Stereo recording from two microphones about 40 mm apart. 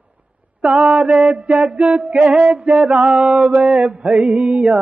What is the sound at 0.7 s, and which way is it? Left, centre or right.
Male singing, right.